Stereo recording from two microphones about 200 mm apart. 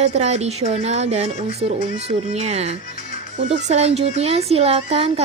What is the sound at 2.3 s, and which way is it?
A woman's voice, 30° right (ahead or behind).